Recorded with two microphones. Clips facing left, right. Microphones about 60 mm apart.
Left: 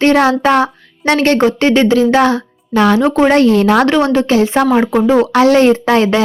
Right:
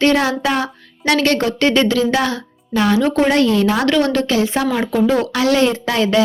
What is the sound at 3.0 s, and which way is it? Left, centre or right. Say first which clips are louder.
Speech: left 4 dB; left.